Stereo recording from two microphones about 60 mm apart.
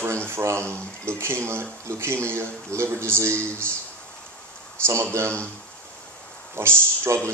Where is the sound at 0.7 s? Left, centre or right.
Right.